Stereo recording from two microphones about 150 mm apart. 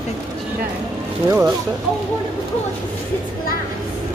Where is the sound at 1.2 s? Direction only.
15° right (ahead or behind).